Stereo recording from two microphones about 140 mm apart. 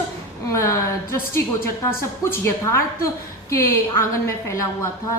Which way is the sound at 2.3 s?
20° left (ahead or behind).